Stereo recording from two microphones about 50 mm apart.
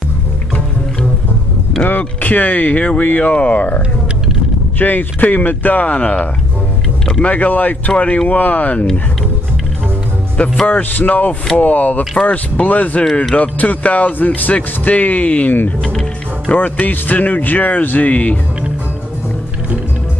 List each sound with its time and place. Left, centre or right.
1.9 s speech: left
10.3 s speech: left
10.7 s speech: left